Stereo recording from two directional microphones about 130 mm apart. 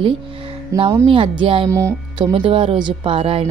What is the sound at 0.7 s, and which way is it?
Speech, 25° right (ahead or behind).